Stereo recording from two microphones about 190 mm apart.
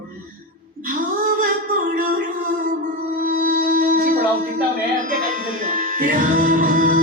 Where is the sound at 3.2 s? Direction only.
45° right (ahead or behind).